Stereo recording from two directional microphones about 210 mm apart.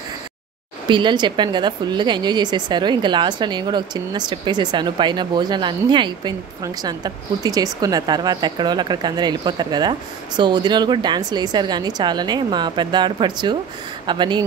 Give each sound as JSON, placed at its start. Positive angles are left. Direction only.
{"t": 0.8, "sound": "a woman's voice", "side_deg": -20}